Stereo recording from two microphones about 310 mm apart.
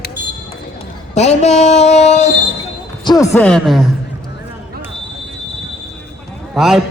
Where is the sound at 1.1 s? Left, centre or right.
Left.